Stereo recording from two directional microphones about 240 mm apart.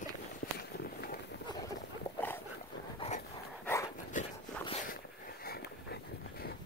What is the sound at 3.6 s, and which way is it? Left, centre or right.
Dog, centre.